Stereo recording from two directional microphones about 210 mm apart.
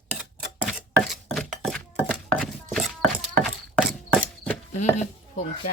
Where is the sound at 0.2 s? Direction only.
Centre (ahead or behind).